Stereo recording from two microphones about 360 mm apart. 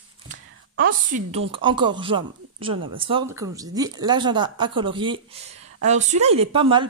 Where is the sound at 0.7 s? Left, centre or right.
Right.